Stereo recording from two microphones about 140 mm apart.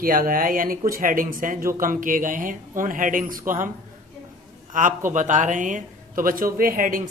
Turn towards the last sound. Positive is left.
turn(degrees=-75)  # may be behind; listen again after turning